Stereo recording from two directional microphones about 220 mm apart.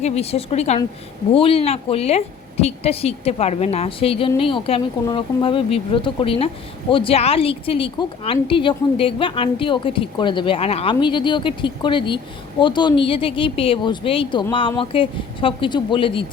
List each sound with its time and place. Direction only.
0.0 s a woman's voice: 30° left (ahead or behind)